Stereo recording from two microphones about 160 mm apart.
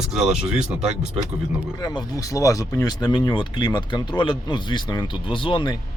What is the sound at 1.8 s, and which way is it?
Speech, 25° left (ahead or behind).